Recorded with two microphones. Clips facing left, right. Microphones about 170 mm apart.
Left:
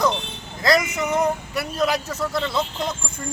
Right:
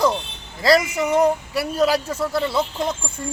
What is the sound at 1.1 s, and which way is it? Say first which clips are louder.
Speech: right 5 dB; 10° right (ahead or behind).